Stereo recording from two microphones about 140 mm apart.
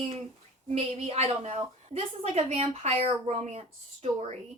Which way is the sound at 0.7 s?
50° right (ahead or behind).